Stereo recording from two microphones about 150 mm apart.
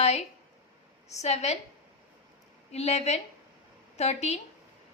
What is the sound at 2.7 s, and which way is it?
A woman's voice, 45° left (ahead or behind).